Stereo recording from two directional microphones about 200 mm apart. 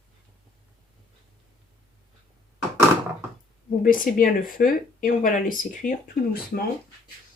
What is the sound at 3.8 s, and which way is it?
Speech, 45° left (ahead or behind).